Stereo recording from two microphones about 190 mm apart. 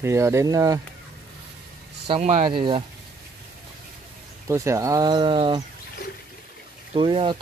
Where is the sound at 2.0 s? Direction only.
30° right (ahead or behind).